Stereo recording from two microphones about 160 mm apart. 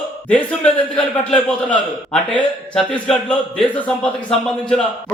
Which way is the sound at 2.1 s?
5° left (ahead or behind).